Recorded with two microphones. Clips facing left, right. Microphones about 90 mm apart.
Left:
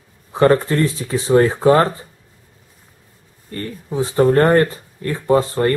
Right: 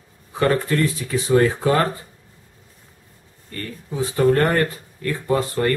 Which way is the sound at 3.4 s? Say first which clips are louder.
Left 5 dB; 25° left (ahead or behind).